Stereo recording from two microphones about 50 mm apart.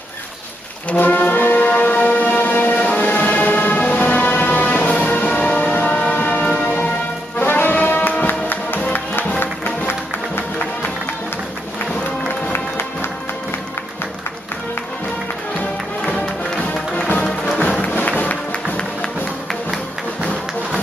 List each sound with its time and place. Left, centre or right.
0.8 s brass instrument: left
1.6 s music: left
7.3 s brass instrument: left
8.2 s music: left
9.4 s music: left
17.8 s music: left